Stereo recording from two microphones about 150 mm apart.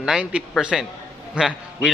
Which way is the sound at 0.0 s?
5° right (ahead or behind).